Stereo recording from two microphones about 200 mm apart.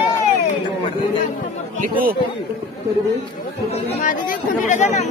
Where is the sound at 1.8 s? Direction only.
45° right (ahead or behind).